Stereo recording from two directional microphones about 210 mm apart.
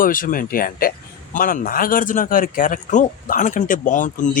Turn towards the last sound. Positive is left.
turn(degrees=40)  # may be behind; listen again after turning